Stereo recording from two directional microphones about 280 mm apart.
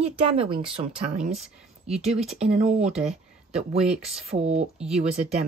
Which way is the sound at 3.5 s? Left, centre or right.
Right.